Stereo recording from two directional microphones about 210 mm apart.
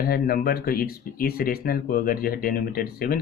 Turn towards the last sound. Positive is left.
turn(degrees=45)  # may be behind; listen again after turning